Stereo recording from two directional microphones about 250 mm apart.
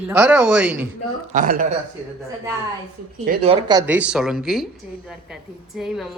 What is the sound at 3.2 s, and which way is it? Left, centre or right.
Speech, right.